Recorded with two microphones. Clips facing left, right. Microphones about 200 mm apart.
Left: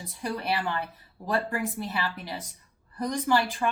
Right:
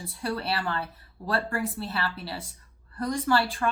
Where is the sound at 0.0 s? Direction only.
15° left (ahead or behind).